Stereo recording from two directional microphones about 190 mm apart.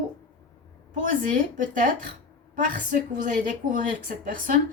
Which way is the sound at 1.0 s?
45° right (ahead or behind).